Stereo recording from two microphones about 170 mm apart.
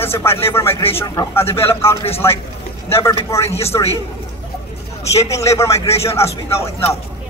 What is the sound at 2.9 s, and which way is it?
Speech, 15° left (ahead or behind).